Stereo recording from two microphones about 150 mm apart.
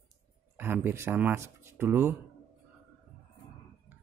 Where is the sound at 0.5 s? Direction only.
15° right (ahead or behind).